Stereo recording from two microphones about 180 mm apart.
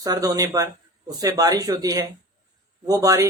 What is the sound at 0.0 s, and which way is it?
Speech, 20° right (ahead or behind).